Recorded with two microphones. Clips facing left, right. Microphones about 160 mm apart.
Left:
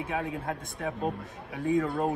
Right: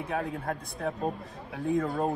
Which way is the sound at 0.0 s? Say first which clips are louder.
Even; centre (ahead or behind).